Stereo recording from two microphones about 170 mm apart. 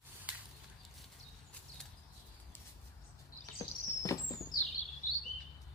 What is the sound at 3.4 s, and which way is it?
Chirp, 20° left (ahead or behind).